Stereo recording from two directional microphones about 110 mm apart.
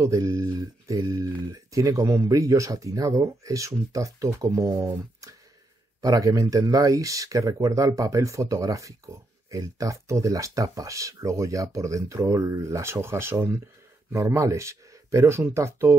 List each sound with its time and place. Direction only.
0.0 s speech: 30° right (ahead or behind)